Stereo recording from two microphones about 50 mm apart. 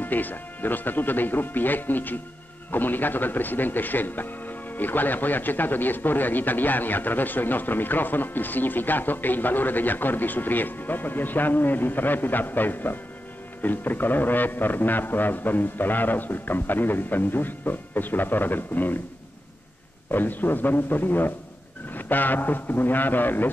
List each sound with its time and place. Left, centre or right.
0.0 s speech: left
20.1 s speech: left